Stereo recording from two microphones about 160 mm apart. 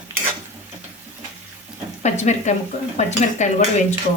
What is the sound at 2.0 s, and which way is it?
Speech, 45° left (ahead or behind).